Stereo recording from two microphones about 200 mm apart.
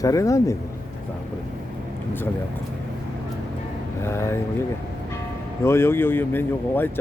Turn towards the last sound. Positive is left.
turn(degrees=10)  # may be behind; listen again after turning